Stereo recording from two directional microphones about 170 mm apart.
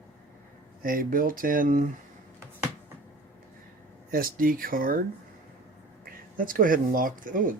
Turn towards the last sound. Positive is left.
turn(degrees=-55)  # may be behind; listen again after turning